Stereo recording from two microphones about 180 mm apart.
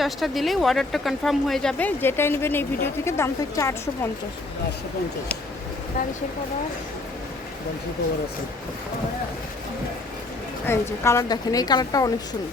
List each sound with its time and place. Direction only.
0.0 s speech: centre (ahead or behind); by 3.8 s 15° left (ahead or behind)
10.7 s a woman's voice: 15° left (ahead or behind)